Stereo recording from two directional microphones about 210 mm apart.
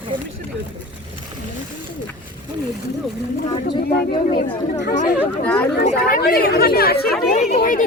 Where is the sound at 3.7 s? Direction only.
25° left (ahead or behind).